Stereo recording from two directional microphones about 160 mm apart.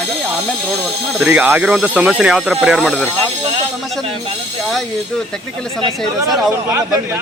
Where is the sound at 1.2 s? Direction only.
10° right (ahead or behind).